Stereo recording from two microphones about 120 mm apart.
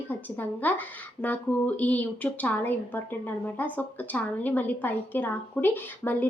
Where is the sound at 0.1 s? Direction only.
15° left (ahead or behind).